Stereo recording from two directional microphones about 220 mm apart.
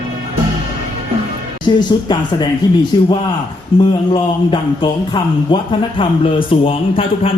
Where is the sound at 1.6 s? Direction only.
20° left (ahead or behind).